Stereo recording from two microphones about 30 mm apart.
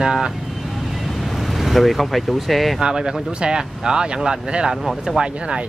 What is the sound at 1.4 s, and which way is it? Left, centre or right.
Speech, centre.